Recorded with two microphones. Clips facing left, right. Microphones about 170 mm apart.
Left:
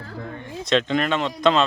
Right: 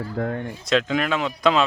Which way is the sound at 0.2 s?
60° right (ahead or behind).